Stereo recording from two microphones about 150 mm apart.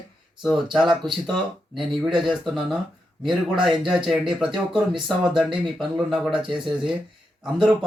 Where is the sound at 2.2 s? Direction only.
Centre (ahead or behind).